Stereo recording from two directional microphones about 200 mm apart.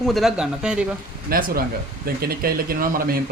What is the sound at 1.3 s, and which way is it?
Speech, 45° right (ahead or behind).